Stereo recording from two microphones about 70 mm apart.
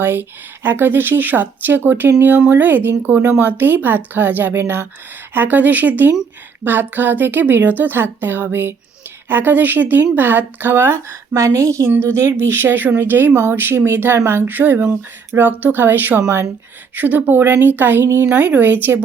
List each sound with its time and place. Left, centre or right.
0.0 s a woman's voice: right
16.9 s speech: right
18.3 s speech: right